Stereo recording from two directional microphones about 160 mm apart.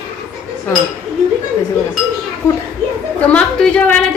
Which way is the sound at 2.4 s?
15° left (ahead or behind).